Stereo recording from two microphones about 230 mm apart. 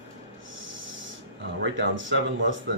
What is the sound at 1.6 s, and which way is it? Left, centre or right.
Speech, right.